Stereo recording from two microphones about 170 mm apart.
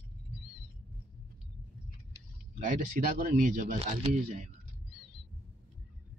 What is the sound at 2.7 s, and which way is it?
Speech, 55° right (ahead or behind).